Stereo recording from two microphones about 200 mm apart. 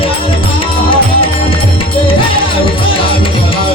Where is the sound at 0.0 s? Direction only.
25° left (ahead or behind).